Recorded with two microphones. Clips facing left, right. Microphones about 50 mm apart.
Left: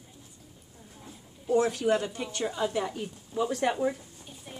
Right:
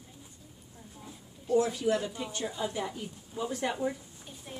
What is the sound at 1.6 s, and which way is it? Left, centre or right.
Speech, left.